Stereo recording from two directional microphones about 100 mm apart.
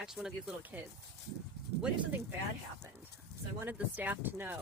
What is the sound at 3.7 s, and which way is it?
Speech, 15° right (ahead or behind).